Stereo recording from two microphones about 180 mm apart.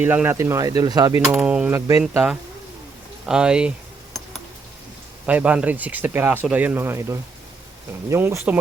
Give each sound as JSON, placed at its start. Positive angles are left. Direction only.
{"t": 0.0, "sound": "speech", "side_deg": -10}
{"t": 1.4, "sound": "speech", "side_deg": -5}
{"t": 3.2, "sound": "speech", "side_deg": -5}
{"t": 5.2, "sound": "speech", "side_deg": -10}